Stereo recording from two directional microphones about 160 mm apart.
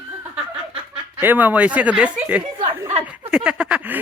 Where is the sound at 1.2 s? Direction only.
10° right (ahead or behind).